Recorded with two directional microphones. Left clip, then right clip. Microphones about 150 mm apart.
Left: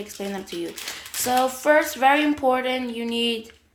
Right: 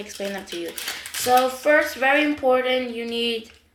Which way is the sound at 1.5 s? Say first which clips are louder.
Even; 90° left.